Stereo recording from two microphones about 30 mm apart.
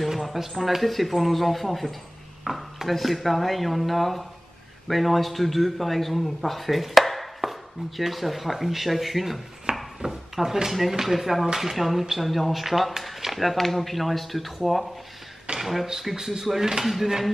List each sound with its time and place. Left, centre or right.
0.0 s a sound: centre
0.6 s speech: centre
2.4 s dishes: centre
2.9 s a man's voice: centre
9.7 s a sound: right
10.0 s speech: centre
11.4 s speech: centre
11.7 s speech: centre
15.9 s speech: centre